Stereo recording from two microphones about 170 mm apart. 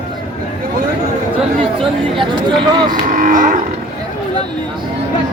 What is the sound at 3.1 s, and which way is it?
Livestock, 55° right (ahead or behind).